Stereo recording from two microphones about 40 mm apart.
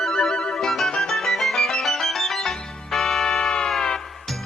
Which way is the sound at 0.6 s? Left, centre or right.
Centre.